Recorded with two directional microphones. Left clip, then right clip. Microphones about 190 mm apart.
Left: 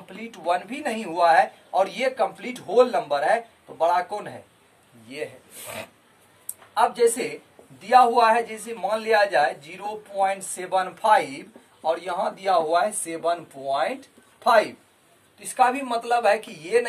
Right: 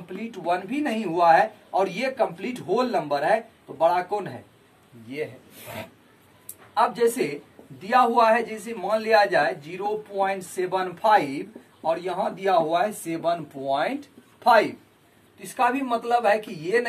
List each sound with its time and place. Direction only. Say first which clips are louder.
0.1 s a man's voice: left 1 dB; 30° left (ahead or behind)
5.0 s a woman's voice: right 1 dB; 35° left (ahead or behind); by 14.7 s 20° left (ahead or behind)
15.5 s speech: left 2 dB; 30° left (ahead or behind)